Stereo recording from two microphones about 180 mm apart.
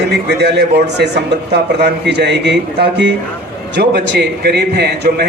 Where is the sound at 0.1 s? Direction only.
70° right (ahead or behind).